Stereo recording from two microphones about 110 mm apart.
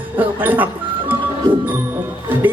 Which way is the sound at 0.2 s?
15° right (ahead or behind).